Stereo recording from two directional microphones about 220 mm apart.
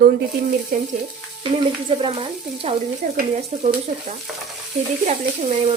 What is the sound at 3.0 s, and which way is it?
A woman's voice, 35° right (ahead or behind).